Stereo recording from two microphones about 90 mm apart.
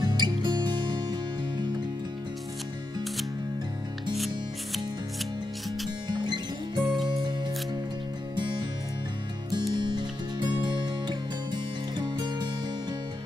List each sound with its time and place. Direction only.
0.0 s music: 50° right (ahead or behind)
6.0 s music: 55° right (ahead or behind)
9.8 s music: 55° right (ahead or behind)